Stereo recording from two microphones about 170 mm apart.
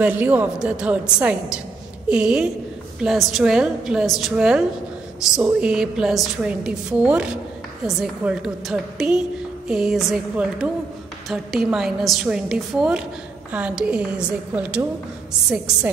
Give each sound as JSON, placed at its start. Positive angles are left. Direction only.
{"t": 0.0, "sound": "a woman's voice", "side_deg": -10}